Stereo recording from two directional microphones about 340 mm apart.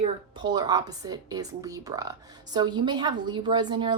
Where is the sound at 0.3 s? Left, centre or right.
Centre.